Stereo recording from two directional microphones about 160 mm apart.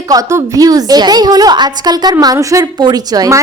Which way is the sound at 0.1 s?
20° right (ahead or behind).